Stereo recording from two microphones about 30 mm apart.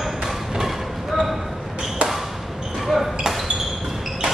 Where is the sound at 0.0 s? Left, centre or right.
Centre.